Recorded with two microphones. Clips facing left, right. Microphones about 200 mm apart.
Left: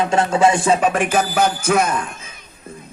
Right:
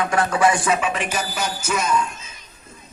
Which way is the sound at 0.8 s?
50° left (ahead or behind).